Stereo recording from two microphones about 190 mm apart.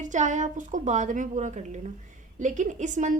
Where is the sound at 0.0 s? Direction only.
40° right (ahead or behind).